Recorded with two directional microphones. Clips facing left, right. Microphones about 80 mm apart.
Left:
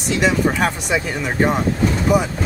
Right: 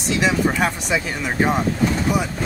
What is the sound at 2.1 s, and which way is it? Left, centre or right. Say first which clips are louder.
Speech: left 5 dB; left.